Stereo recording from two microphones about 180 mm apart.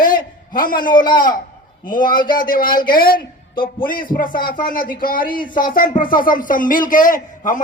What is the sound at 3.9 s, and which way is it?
A man's voice, 50° left (ahead or behind).